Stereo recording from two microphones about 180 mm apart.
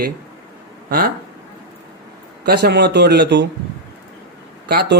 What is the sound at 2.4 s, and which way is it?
Speech, 65° right (ahead or behind).